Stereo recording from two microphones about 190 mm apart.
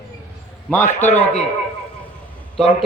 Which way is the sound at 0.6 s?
10° left (ahead or behind).